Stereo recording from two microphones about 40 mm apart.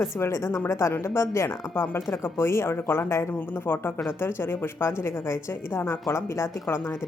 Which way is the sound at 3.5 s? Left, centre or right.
Left.